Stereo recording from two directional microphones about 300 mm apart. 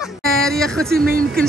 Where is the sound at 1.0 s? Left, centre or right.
Right.